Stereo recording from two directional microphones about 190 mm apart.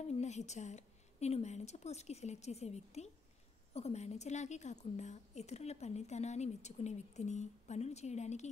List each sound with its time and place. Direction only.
0.0 s a woman's voice: 35° left (ahead or behind)